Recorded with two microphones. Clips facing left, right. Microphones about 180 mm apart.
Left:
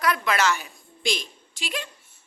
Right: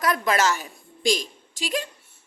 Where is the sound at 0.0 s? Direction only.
40° right (ahead or behind).